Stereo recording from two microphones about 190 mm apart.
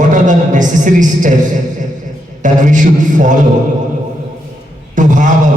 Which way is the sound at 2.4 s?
40° right (ahead or behind).